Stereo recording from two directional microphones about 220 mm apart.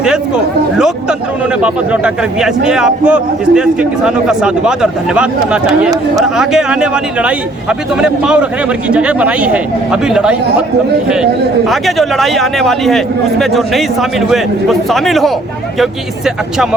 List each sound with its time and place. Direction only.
1.6 s a man's voice: 5° right (ahead or behind)
11.7 s a man's voice: centre (ahead or behind)